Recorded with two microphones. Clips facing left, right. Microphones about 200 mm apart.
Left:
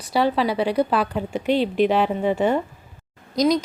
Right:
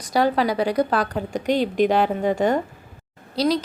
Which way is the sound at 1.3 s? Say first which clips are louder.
Even; 40° right (ahead or behind).